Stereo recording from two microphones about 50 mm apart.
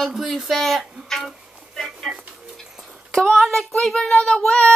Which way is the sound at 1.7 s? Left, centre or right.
Centre.